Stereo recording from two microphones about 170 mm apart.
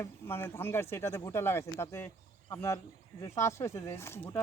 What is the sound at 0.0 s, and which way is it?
Speech, 15° left (ahead or behind).